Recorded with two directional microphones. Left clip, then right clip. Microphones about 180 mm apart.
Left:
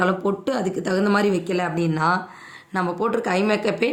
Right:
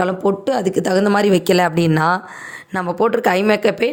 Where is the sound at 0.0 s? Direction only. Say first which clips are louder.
Right 4 dB; 35° right (ahead or behind).